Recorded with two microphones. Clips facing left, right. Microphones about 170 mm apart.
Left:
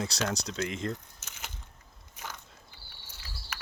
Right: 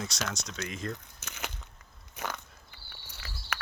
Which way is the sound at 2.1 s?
70° right (ahead or behind).